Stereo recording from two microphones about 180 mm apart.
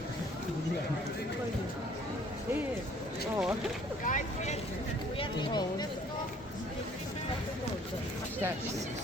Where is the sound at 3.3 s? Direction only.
5° right (ahead or behind).